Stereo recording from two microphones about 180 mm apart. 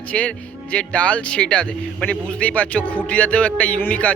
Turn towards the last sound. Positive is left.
turn(degrees=10)  # may be behind; listen again after turning